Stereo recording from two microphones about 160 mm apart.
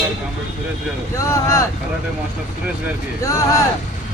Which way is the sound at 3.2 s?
20° left (ahead or behind).